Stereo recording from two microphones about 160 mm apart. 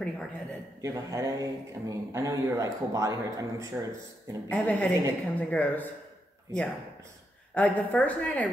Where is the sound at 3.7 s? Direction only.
10° right (ahead or behind).